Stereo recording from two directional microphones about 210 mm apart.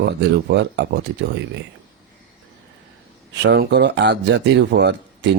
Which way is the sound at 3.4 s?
50° right (ahead or behind).